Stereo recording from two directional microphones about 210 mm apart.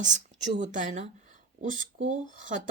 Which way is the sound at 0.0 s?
35° right (ahead or behind).